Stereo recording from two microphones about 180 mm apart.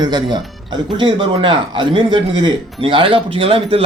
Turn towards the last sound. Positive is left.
turn(degrees=-30)  # may be behind; listen again after turning